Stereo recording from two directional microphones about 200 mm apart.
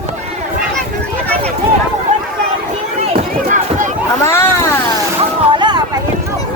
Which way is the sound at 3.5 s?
40° right (ahead or behind).